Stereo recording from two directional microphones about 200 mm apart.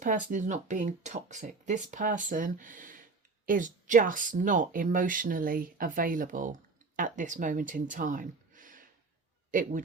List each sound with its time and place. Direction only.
0.0 s speech: 40° right (ahead or behind)